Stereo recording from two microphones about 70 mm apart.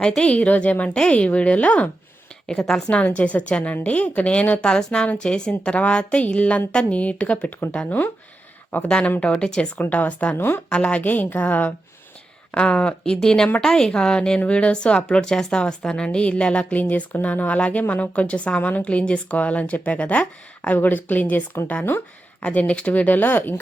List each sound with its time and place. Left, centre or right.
0.0 s a woman's voice: centre
2.5 s a woman's voice: centre; by 8.1 s left
8.9 s a woman's voice: centre
10.3 s speech: left
10.7 s a woman's voice: centre
22.4 s speech: centre